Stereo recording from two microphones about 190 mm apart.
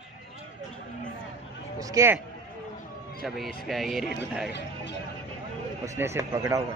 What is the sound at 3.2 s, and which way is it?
Speech, centre (ahead or behind).